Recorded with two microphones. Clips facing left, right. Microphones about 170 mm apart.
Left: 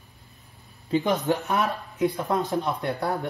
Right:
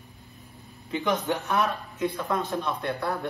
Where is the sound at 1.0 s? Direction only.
40° left (ahead or behind).